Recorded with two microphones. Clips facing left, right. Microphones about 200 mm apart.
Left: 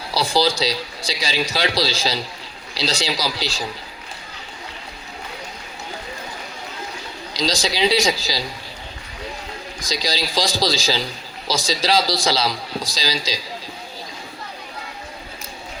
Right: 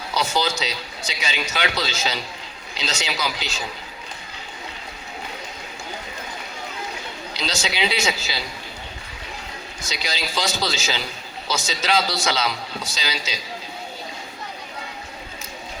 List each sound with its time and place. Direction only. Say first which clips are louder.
0.1 s a man's voice: left 4 dB; 35° left (ahead or behind)
7.3 s a man's voice: left 5 dB; 35° left (ahead or behind)
9.9 s a man's voice: left 5 dB; 35° left (ahead or behind)